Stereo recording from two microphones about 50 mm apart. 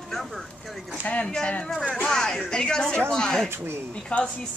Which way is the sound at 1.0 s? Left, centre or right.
Left.